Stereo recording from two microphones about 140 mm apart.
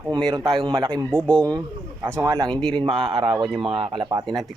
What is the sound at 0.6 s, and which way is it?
Speech, 35° right (ahead or behind).